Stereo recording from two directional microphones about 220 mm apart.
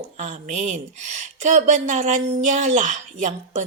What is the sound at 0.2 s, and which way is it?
A woman's voice, 30° right (ahead or behind).